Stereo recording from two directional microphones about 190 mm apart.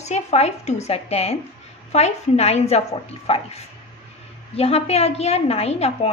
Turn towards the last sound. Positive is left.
turn(degrees=35)  # may be behind; listen again after turning